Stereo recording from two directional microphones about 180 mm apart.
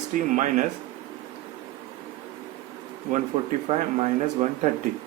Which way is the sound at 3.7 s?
40° right (ahead or behind).